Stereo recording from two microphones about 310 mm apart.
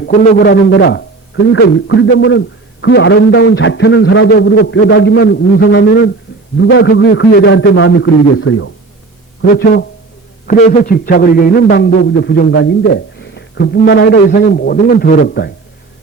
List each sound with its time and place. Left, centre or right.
0.0 s a man's voice: left